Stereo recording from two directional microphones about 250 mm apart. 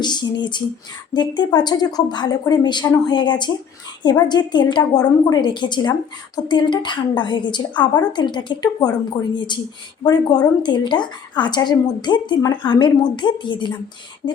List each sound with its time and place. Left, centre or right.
0.0 s a woman's voice: centre